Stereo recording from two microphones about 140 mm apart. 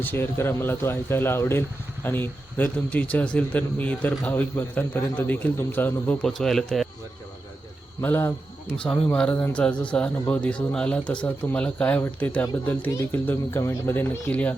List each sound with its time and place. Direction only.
0.0 s speech: 15° left (ahead or behind)
8.0 s speech: 15° left (ahead or behind)